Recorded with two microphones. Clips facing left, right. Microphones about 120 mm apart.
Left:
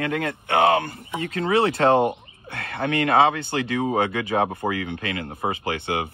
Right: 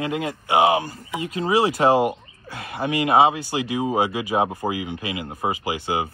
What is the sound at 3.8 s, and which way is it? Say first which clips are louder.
Speech: right 1 dB; 10° right (ahead or behind).